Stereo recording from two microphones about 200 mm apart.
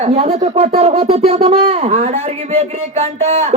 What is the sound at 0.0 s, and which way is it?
A man's voice, 30° right (ahead or behind).